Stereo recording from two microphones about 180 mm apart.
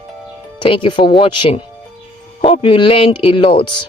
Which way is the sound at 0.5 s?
25° left (ahead or behind).